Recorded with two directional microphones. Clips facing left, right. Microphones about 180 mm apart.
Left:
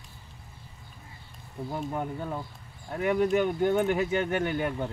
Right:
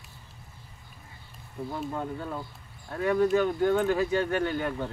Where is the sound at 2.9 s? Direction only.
20° left (ahead or behind).